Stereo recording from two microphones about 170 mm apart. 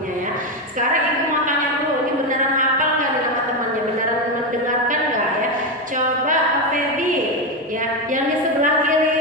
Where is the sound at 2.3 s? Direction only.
50° right (ahead or behind).